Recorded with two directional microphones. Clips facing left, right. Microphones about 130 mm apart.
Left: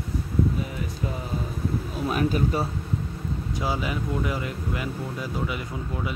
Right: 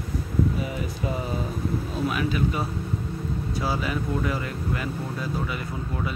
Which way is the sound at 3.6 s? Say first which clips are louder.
Even; 20° left (ahead or behind).